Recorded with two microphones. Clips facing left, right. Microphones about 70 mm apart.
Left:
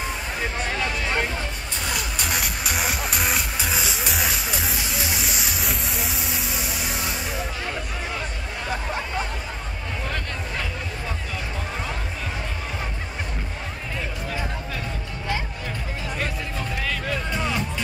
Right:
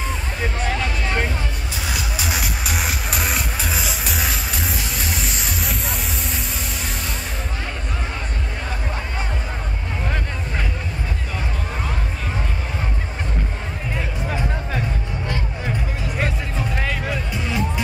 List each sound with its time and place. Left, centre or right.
0.7 s music: centre
16.7 s music: right